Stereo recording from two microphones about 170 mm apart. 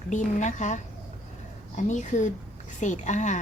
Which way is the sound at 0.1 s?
45° left (ahead or behind).